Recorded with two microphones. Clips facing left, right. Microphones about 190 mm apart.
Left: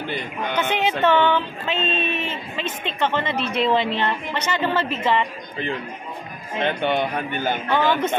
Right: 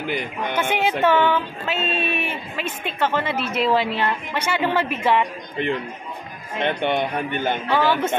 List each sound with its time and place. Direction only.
0.0 s speech: 10° right (ahead or behind)
6.6 s speech: 20° right (ahead or behind)